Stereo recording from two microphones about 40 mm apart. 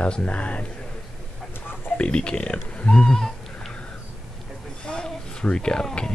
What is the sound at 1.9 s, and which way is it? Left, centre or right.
Speech, left.